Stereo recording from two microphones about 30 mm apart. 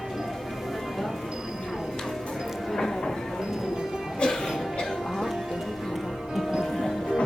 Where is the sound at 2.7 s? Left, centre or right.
Centre.